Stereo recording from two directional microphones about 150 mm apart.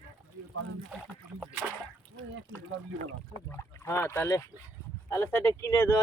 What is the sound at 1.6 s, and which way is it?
Speech, 15° right (ahead or behind).